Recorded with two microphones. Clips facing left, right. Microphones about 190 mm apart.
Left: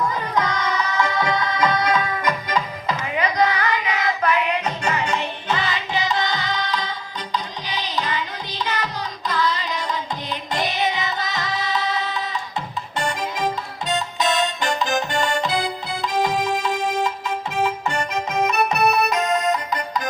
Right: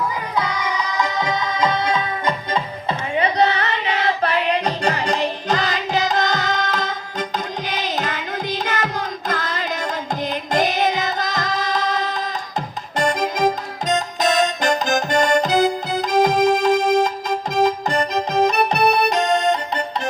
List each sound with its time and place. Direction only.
0.3 s music: 10° right (ahead or behind); by 19.8 s 30° right (ahead or behind)